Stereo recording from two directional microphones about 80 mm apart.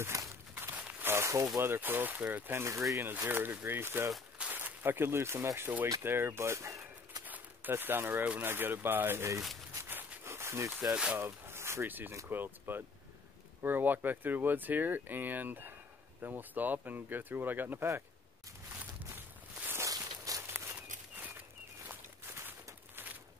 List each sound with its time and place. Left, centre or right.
0.0 s walk: right
0.7 s a sound: centre
1.1 s a sound: right
1.6 s speech: right
2.6 s speech: right
3.3 s speech: right
7.2 s a sound: right
7.7 s speech: right
9.8 s a sound: right
11.1 s speech: right
18.8 s walk: right
19.8 s walk: right
20.4 s walk: right
21.8 s walk: right